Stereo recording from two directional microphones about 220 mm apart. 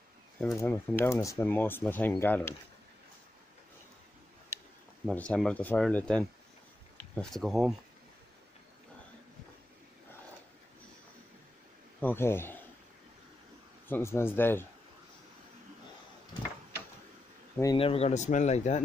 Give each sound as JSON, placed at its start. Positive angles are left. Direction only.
{"t": 0.5, "sound": "speech", "side_deg": 10}
{"t": 5.0, "sound": "speech", "side_deg": 5}
{"t": 12.0, "sound": "speech", "side_deg": 10}
{"t": 13.8, "sound": "speech", "side_deg": 10}
{"t": 17.6, "sound": "speech", "side_deg": 20}